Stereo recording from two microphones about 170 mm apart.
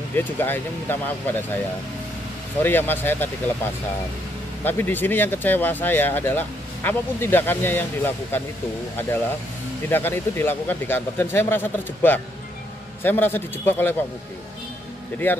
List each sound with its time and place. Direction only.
0.1 s speech: 10° left (ahead or behind)
2.6 s speech: 10° left (ahead or behind)
9.8 s speech: 15° left (ahead or behind)
15.2 s speech: 10° left (ahead or behind)